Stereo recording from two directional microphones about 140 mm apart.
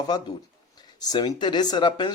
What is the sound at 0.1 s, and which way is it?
Speech, 30° left (ahead or behind).